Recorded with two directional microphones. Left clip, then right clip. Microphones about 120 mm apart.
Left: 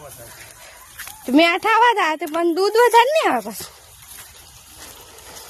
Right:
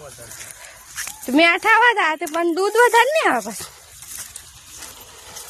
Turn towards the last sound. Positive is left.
turn(degrees=30)  # may be behind; listen again after turning